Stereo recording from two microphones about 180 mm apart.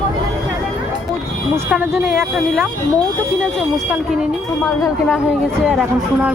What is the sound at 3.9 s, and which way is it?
Speech, 5° right (ahead or behind).